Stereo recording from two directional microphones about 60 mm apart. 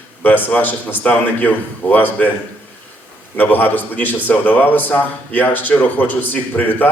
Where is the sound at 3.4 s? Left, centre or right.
Left.